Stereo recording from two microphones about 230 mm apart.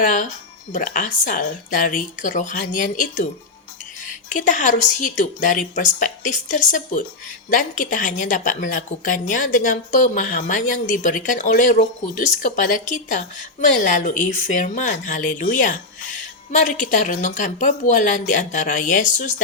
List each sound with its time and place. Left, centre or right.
0.0 s a woman's voice: left
4.3 s a woman's voice: left